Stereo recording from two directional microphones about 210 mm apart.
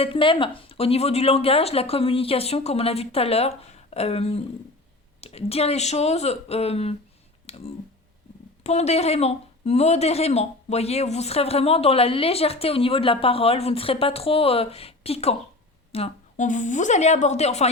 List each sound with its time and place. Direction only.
0.0 s speech: 25° left (ahead or behind)
7.4 s a sound: 30° left (ahead or behind)
8.6 s a woman's voice: 30° left (ahead or behind)